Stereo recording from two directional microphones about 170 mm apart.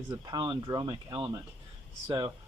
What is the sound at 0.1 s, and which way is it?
Speech, 25° right (ahead or behind).